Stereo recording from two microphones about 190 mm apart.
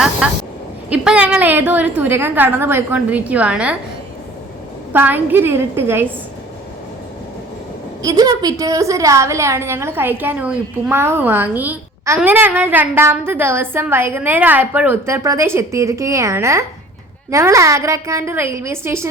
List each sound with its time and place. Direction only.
0.9 s a woman's voice: 5° right (ahead or behind)
4.9 s a woman's voice: 10° right (ahead or behind)
8.0 s a woman's voice: 20° right (ahead or behind)